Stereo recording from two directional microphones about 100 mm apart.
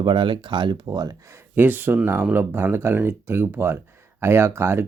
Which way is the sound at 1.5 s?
20° right (ahead or behind).